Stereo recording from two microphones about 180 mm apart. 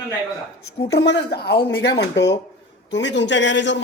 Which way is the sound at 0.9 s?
70° left (ahead or behind).